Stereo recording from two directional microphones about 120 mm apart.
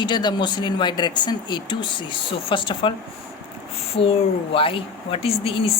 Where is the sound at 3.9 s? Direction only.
50° left (ahead or behind).